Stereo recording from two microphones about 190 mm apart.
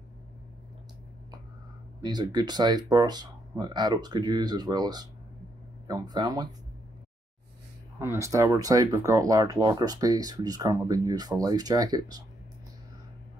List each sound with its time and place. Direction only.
2.0 s speech: 20° right (ahead or behind)
8.0 s speech: 15° right (ahead or behind)